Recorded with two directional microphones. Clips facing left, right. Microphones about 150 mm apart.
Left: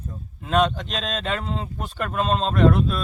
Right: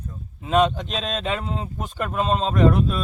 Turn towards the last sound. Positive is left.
turn(degrees=0)  # may be behind; listen again after turning